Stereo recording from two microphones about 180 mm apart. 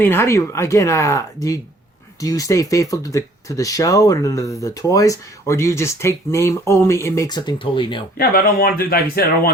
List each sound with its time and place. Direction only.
0.0 s speech: 15° left (ahead or behind)
8.2 s speech: 55° left (ahead or behind)